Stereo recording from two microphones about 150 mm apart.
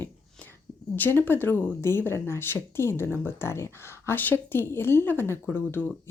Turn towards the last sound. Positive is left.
turn(degrees=15)  # may be behind; listen again after turning